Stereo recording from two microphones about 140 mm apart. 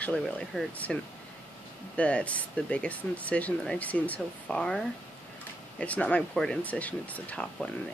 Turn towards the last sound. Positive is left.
turn(degrees=5)  # may be behind; listen again after turning